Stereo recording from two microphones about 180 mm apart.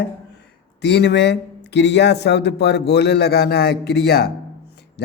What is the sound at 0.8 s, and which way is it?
A man's voice, 65° left (ahead or behind).